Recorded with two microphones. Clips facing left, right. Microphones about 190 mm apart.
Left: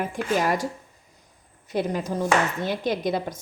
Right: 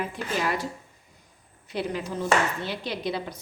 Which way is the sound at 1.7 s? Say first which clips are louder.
Left 4 dB; 45° left (ahead or behind).